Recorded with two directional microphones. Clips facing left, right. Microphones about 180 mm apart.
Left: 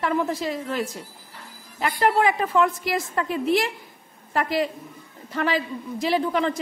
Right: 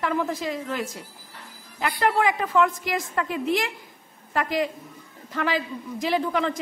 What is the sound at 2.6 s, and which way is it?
A woman's voice, 35° left (ahead or behind).